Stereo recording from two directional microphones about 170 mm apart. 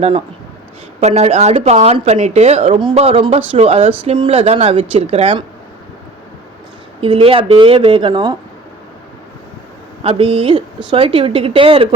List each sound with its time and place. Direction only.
1.0 s a woman's voice: 40° right (ahead or behind)
7.0 s a woman's voice: 30° right (ahead or behind)
10.0 s a woman's voice: 35° right (ahead or behind)